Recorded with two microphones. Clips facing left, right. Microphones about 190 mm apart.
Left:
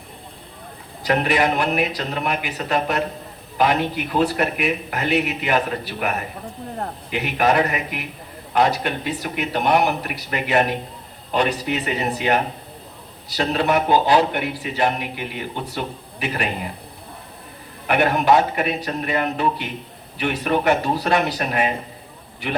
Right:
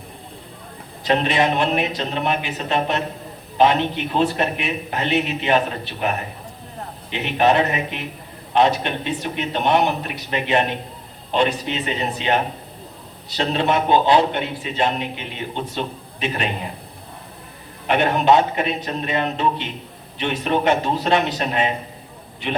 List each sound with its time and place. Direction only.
1.0 s a man's voice: 25° right (ahead or behind)
17.8 s a man's voice: 20° right (ahead or behind)